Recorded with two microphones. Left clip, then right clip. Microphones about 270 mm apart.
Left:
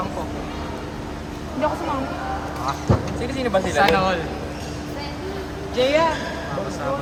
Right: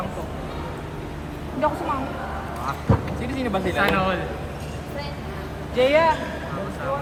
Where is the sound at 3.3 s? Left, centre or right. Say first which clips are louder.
Left 5 dB; left.